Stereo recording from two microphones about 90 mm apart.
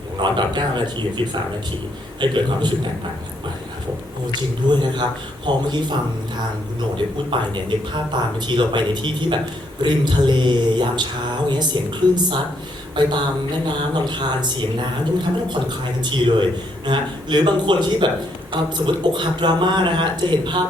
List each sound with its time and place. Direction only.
0.2 s speech: 60° right (ahead or behind)
4.7 s speech: 60° right (ahead or behind)
13.7 s speech: 60° right (ahead or behind)